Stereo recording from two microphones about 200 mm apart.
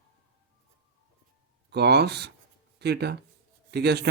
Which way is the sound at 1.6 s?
55° right (ahead or behind).